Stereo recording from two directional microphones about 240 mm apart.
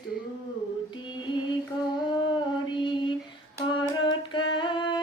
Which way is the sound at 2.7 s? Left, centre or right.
Centre.